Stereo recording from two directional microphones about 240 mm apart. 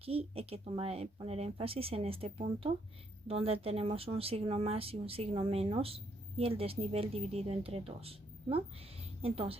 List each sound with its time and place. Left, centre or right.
0.0 s speech: right